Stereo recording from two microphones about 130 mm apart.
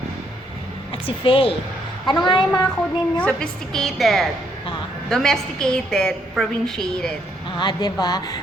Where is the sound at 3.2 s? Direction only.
10° left (ahead or behind).